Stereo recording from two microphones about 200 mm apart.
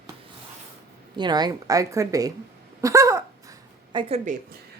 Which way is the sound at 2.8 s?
15° right (ahead or behind).